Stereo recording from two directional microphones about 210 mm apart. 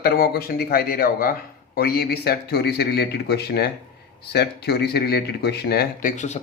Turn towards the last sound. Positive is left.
turn(degrees=35)  # may be behind; listen again after turning